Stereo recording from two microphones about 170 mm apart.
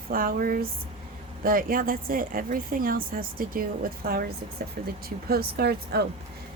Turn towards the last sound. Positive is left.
turn(degrees=-70)  # may be behind; listen again after turning